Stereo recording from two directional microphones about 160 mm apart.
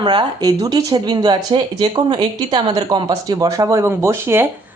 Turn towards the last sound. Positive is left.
turn(degrees=-15)  # may be behind; listen again after turning